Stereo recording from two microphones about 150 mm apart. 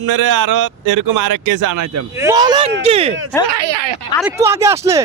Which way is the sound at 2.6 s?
40° right (ahead or behind).